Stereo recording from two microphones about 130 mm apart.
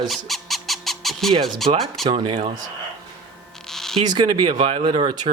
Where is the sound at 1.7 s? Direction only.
45° right (ahead or behind).